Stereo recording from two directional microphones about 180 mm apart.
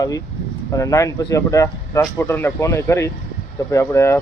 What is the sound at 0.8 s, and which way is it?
Speech, 15° left (ahead or behind).